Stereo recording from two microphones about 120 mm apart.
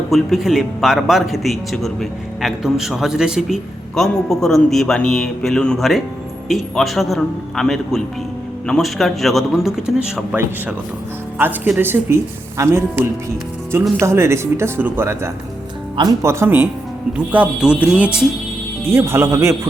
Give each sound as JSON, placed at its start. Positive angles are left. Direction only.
{"t": 0.1, "sound": "a man's voice", "side_deg": 0}
{"t": 11.3, "sound": "speech", "side_deg": -15}
{"t": 18.9, "sound": "speech", "side_deg": -20}